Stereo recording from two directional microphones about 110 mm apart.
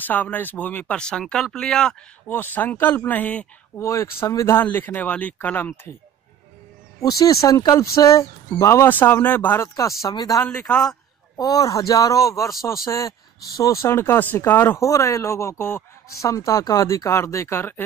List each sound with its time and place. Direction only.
0.0 s speech: 15° left (ahead or behind)
3.8 s speech: 25° left (ahead or behind)
4.6 s speech: 15° left (ahead or behind)
7.0 s speech: 35° left (ahead or behind)
10.7 s a man's voice: 5° left (ahead or behind)
11.3 s speech: 35° left (ahead or behind)